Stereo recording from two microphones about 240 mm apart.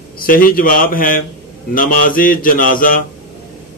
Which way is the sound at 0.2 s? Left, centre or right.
Left.